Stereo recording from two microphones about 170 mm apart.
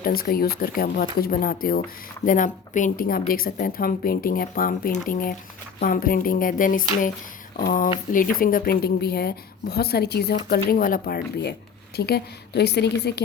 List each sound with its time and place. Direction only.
0.0 s speech: 60° left (ahead or behind)
11.9 s a woman's voice: 70° left (ahead or behind)